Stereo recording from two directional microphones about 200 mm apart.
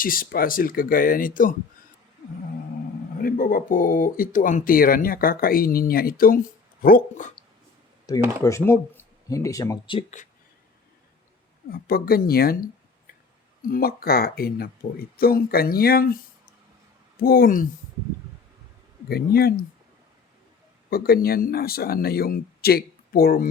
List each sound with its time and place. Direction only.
0.0 s speech: 45° left (ahead or behind)
3.2 s speech: 45° left (ahead or behind)
8.1 s speech: 20° left (ahead or behind)
11.7 s speech: 50° left (ahead or behind)
17.2 s speech: 45° left (ahead or behind)
19.0 s speech: 50° left (ahead or behind)
20.9 s speech: 50° left (ahead or behind)